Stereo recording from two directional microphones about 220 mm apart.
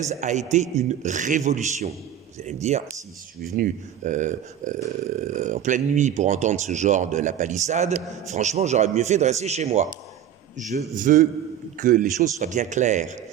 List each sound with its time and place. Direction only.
0.1 s speech: 35° right (ahead or behind)